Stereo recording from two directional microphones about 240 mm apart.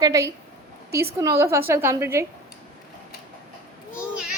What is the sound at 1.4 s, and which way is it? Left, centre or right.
Speech, centre.